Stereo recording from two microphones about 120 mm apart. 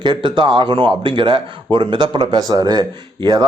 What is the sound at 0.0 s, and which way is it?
Speech, 40° right (ahead or behind).